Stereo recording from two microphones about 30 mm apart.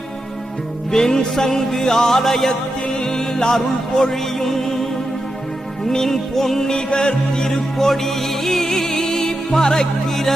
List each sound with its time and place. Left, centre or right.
0.9 s music: centre
4.1 s music: centre
5.9 s music: centre; by 7.6 s left
7.8 s music: centre